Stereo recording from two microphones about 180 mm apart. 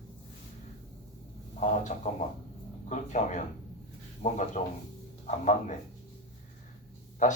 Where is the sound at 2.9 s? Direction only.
40° left (ahead or behind).